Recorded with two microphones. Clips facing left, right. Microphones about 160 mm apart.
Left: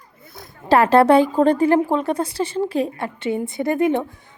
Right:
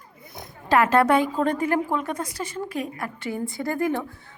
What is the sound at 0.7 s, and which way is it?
A woman's voice, 30° left (ahead or behind).